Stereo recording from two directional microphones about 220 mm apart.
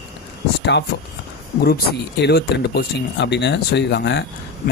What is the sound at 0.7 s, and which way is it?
Speech, 50° left (ahead or behind).